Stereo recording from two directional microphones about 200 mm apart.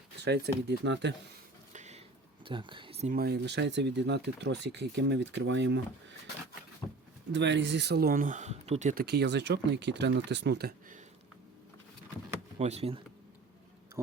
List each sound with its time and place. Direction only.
0.3 s speech: 60° right (ahead or behind)
1.7 s a sound: 35° right (ahead or behind)
3.1 s speech: 50° right (ahead or behind)
7.3 s speech: 60° right (ahead or behind); by 9.0 s 40° right (ahead or behind)
9.0 s speech: 55° right (ahead or behind)
12.5 s speech: 30° right (ahead or behind)